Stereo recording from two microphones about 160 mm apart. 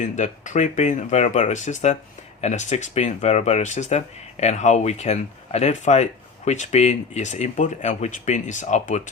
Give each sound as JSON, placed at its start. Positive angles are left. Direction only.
{"t": 0.0, "sound": "speech", "side_deg": 50}